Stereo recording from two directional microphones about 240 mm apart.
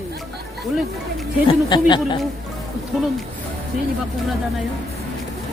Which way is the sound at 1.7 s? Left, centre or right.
Centre.